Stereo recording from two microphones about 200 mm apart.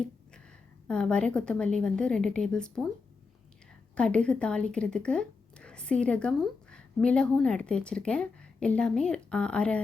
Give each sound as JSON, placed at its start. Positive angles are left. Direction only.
{"t": 0.9, "sound": "a woman's voice", "side_deg": 5}
{"t": 3.9, "sound": "speech", "side_deg": 5}